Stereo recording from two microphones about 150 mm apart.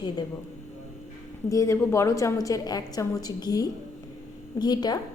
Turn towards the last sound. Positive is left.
turn(degrees=30)  # may be behind; listen again after turning